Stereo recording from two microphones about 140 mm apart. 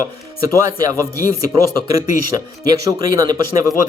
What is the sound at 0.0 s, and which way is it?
Speech, 25° right (ahead or behind).